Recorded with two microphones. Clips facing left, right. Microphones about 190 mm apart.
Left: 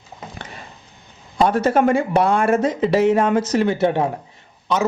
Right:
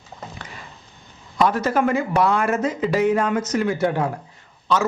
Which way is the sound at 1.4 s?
30° left (ahead or behind).